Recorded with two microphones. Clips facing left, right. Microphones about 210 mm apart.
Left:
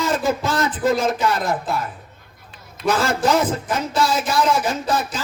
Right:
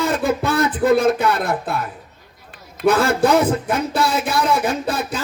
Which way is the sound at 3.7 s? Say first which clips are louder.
Right 1 dB; 60° right (ahead or behind).